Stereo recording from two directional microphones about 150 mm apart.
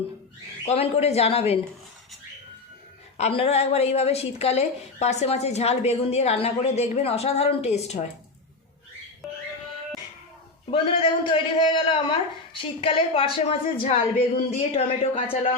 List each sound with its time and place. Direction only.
0.6 s a woman's voice: 45° left (ahead or behind)
3.2 s a woman's voice: 40° left (ahead or behind)
10.7 s a woman's voice: 40° left (ahead or behind)